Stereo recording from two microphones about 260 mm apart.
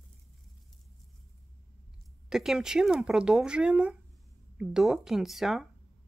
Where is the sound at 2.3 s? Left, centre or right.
Centre.